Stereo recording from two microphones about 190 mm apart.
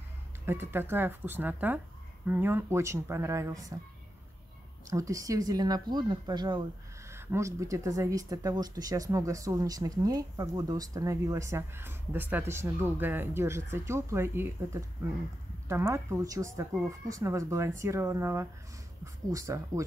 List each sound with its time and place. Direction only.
0.5 s speech: 10° right (ahead or behind)
4.8 s speech: 15° right (ahead or behind)